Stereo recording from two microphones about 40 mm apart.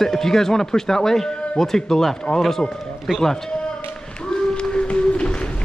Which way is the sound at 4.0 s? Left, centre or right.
Left.